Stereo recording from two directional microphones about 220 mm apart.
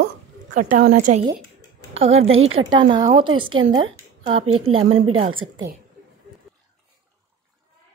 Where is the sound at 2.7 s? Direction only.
20° right (ahead or behind).